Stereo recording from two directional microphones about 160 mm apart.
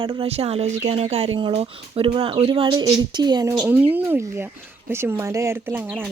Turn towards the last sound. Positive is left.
turn(degrees=-15)  # may be behind; listen again after turning